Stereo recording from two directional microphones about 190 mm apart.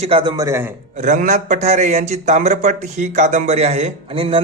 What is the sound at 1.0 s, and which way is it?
A man's voice, 40° right (ahead or behind).